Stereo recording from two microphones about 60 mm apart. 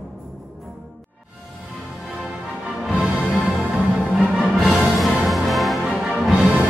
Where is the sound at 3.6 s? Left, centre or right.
Centre.